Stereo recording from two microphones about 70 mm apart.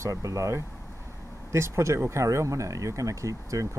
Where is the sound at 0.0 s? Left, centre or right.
Right.